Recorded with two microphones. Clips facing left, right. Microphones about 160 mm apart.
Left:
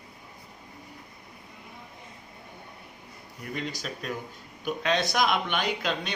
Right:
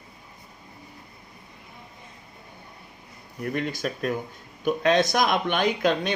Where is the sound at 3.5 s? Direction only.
50° right (ahead or behind).